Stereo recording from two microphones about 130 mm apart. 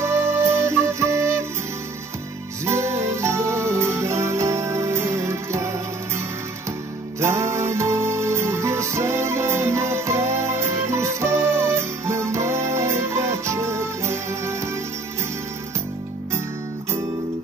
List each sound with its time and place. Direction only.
0.0 s music: 20° right (ahead or behind)
2.6 s music: 20° right (ahead or behind)
7.2 s music: 20° right (ahead or behind)